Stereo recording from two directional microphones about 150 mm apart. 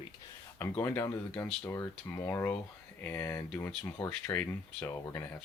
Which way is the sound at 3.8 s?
20° left (ahead or behind).